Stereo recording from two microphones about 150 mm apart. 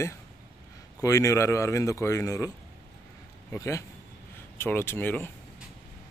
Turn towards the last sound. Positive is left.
turn(degrees=15)  # may be behind; listen again after turning